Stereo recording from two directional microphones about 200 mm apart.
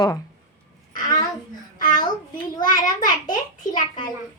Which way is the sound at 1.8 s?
40° left (ahead or behind).